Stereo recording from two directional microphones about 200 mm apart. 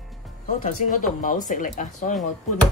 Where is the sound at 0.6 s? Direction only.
40° left (ahead or behind).